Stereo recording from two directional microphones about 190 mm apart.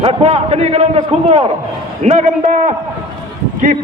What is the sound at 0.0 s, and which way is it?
A man's voice, 30° right (ahead or behind).